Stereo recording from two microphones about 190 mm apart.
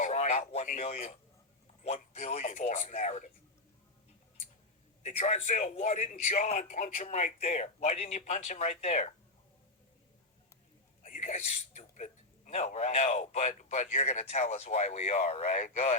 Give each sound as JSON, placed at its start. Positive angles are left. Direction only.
{"t": 0.0, "sound": "a man's voice", "side_deg": 35}
{"t": 5.0, "sound": "a man's voice", "side_deg": 35}
{"t": 11.0, "sound": "speech", "side_deg": 40}